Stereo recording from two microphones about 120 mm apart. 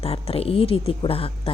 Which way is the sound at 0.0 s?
55° left (ahead or behind).